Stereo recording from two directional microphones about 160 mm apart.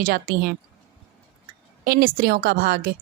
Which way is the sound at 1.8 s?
65° right (ahead or behind).